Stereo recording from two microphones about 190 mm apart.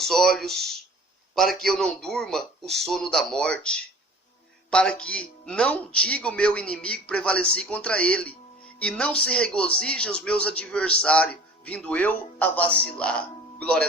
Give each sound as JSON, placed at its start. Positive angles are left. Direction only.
{"t": 0.0, "sound": "speech", "side_deg": 0}